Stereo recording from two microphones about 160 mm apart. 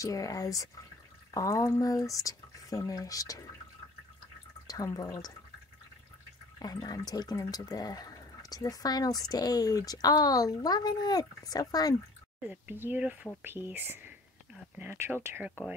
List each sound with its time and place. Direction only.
0.0 s speech: 20° left (ahead or behind)
4.6 s speech: 25° left (ahead or behind)
6.6 s speech: 25° left (ahead or behind)
12.4 s speech: 10° right (ahead or behind)